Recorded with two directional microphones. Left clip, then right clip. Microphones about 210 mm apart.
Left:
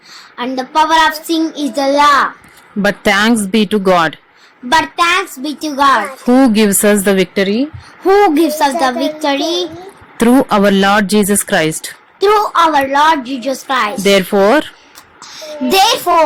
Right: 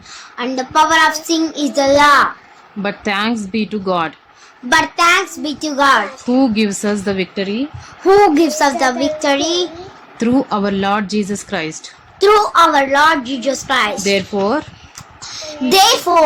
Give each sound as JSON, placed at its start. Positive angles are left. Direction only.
{"t": 0.1, "sound": "child singing", "side_deg": 15}
{"t": 2.8, "sound": "speech", "side_deg": 35}
{"t": 4.7, "sound": "child singing", "side_deg": 15}
{"t": 6.2, "sound": "speech", "side_deg": 35}
{"t": 8.0, "sound": "child singing", "side_deg": 15}
{"t": 10.2, "sound": "speech", "side_deg": 35}
{"t": 12.2, "sound": "child singing", "side_deg": 15}
{"t": 14.0, "sound": "speech", "side_deg": 35}
{"t": 15.2, "sound": "child singing", "side_deg": 15}